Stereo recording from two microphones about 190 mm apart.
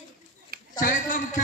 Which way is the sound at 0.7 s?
45° left (ahead or behind).